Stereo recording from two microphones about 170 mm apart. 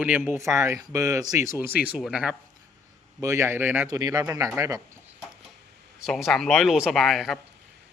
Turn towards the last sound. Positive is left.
turn(degrees=0)  # may be behind; listen again after turning